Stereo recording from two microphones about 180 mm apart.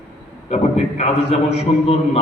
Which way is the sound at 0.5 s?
40° left (ahead or behind).